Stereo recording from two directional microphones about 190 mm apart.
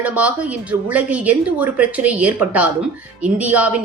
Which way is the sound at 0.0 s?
10° right (ahead or behind).